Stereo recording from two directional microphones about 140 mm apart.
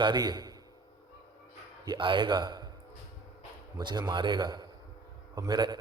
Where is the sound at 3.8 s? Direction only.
30° right (ahead or behind).